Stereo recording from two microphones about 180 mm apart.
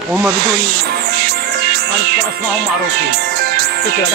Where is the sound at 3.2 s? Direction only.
60° right (ahead or behind).